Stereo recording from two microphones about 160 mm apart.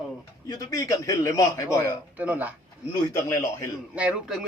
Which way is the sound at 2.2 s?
10° right (ahead or behind).